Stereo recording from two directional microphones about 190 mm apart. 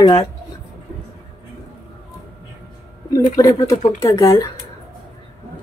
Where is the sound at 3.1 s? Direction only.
20° left (ahead or behind).